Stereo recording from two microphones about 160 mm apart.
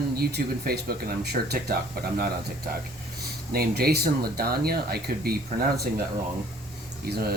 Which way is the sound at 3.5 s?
70° right (ahead or behind).